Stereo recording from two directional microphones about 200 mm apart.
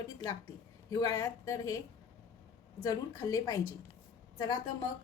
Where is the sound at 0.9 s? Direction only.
15° left (ahead or behind).